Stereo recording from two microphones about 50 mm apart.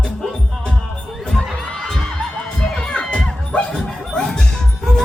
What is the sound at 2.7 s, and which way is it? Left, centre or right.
Crowd, centre.